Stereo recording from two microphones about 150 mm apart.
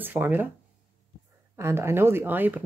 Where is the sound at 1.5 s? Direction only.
15° right (ahead or behind).